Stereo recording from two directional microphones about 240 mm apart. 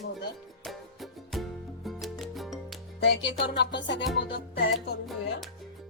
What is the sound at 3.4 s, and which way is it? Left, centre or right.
Music, left.